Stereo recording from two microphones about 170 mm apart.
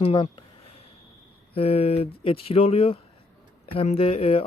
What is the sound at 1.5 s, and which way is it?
Speech, 35° left (ahead or behind).